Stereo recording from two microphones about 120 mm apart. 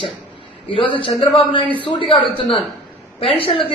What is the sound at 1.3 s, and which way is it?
A man's voice, 45° left (ahead or behind).